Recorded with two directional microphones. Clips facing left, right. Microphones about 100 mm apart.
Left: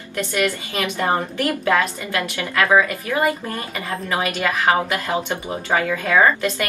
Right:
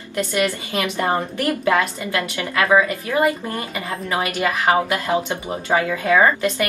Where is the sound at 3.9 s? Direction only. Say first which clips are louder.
Left 1 dB; 30° right (ahead or behind).